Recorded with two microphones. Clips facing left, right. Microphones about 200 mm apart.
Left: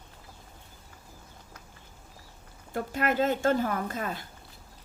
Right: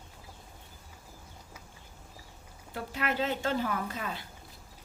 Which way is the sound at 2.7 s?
45° left (ahead or behind).